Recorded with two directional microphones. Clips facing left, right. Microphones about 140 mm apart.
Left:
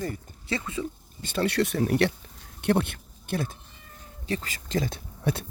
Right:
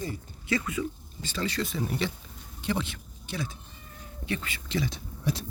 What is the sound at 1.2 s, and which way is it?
Speech, 60° left (ahead or behind).